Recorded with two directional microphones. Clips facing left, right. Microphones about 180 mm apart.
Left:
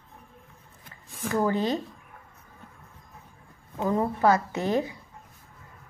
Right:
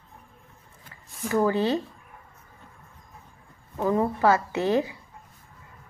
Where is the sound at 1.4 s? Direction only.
15° left (ahead or behind).